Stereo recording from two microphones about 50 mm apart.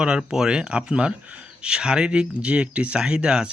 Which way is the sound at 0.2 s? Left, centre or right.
Centre.